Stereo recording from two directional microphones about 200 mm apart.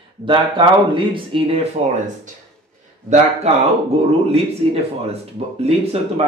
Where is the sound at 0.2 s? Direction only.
25° right (ahead or behind).